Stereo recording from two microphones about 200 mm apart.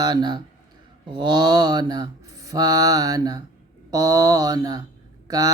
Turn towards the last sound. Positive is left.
turn(degrees=-20)  # may be behind; listen again after turning